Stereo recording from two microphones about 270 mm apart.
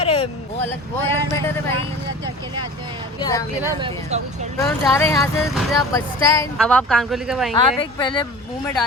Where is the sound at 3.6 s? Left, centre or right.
Centre.